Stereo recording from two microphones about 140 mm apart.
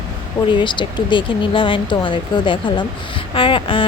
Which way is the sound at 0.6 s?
35° left (ahead or behind).